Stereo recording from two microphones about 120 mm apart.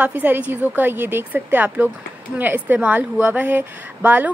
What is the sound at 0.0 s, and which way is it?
A woman's voice, 15° right (ahead or behind).